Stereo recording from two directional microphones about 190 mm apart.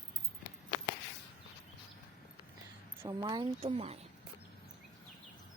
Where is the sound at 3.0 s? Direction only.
25° right (ahead or behind).